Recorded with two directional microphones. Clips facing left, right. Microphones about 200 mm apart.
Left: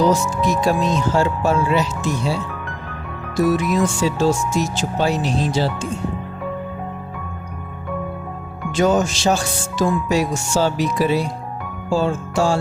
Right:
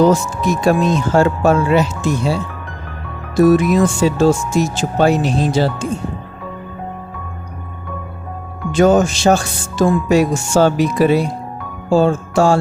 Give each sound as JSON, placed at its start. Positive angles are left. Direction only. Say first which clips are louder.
{"t": 0.0, "sound": "speech", "louder": "right 4 dB", "side_deg": -50}
{"t": 3.5, "sound": "speech", "louder": "right 6 dB", "side_deg": -55}
{"t": 8.7, "sound": "speech", "louder": "right 5 dB", "side_deg": -55}